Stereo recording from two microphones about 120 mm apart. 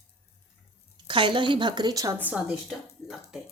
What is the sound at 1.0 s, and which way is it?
A woman's voice, 45° right (ahead or behind).